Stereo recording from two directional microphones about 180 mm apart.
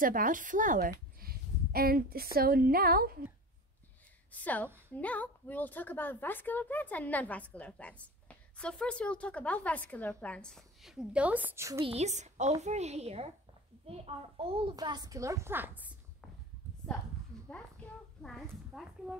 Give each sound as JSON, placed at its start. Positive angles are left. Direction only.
{"t": 0.0, "sound": "speech", "side_deg": -50}
{"t": 1.2, "sound": "a sound", "side_deg": -55}
{"t": 4.3, "sound": "a woman's voice", "side_deg": 10}
{"t": 11.8, "sound": "a woman's voice", "side_deg": -35}
{"t": 18.7, "sound": "speech", "side_deg": 0}